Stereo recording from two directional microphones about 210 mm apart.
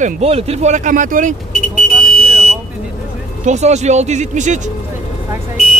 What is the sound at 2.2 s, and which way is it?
Vehicle, centre (ahead or behind).